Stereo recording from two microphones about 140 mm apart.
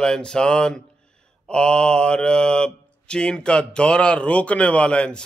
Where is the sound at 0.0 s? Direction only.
5° left (ahead or behind).